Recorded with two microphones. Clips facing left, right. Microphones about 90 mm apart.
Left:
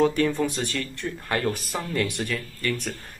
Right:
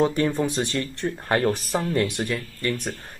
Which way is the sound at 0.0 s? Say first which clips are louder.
Even; 25° right (ahead or behind).